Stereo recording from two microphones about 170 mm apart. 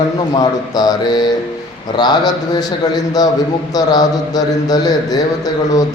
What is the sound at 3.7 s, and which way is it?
Speech, 20° left (ahead or behind).